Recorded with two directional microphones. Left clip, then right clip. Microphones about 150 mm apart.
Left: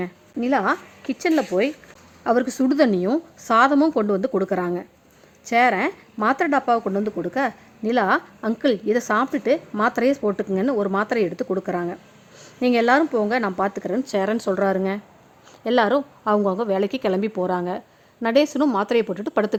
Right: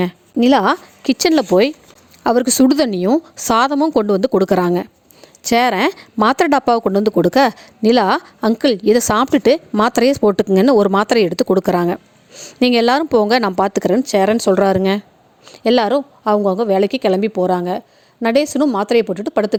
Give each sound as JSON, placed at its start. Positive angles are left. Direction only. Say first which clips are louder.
{"t": 0.0, "sound": "a woman's voice", "louder": "right 11 dB", "side_deg": -75}
{"t": 2.2, "sound": "a woman's voice", "louder": "right 7 dB", "side_deg": -70}
{"t": 12.3, "sound": "a sound", "louder": "right 11 dB", "side_deg": -45}
{"t": 12.5, "sound": "speech", "louder": "right 4 dB", "side_deg": -65}
{"t": 14.0, "sound": "a woman's voice", "louder": "right 5 dB", "side_deg": -40}
{"t": 14.5, "sound": "speech", "louder": "right 8 dB", "side_deg": -55}
{"t": 15.5, "sound": "a woman's voice", "louder": "right 5 dB", "side_deg": -45}